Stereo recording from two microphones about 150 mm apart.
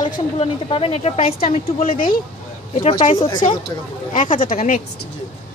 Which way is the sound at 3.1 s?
30° left (ahead or behind).